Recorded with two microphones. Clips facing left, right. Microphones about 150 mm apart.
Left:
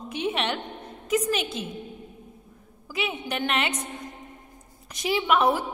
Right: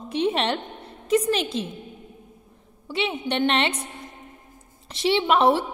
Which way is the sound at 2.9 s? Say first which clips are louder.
Right 4 dB; 30° right (ahead or behind).